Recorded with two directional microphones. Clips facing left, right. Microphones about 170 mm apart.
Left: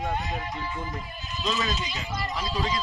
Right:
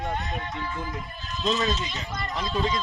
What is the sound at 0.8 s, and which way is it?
Speech, 5° left (ahead or behind).